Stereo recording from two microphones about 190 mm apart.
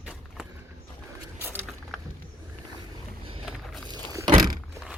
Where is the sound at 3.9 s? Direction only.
20° right (ahead or behind).